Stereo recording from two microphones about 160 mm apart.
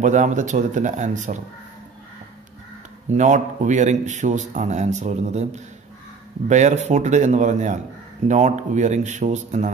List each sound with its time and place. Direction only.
0.0 s speech: 50° right (ahead or behind)
3.1 s speech: 50° right (ahead or behind)